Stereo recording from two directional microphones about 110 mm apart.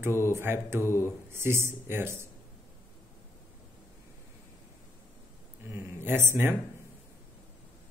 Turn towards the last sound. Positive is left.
turn(degrees=-20)  # may be behind; listen again after turning